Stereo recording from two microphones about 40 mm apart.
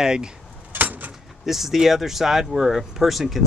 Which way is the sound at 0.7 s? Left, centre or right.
Right.